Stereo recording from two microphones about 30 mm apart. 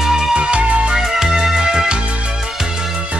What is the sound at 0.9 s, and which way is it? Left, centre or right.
Music, centre.